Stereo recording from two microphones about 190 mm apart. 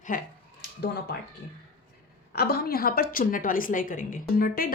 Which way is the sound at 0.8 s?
60° left (ahead or behind).